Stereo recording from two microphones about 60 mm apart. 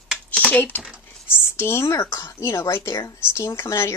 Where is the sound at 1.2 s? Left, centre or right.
Left.